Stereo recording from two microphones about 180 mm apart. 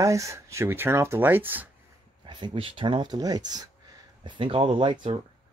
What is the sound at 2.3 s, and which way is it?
Speech, 25° right (ahead or behind).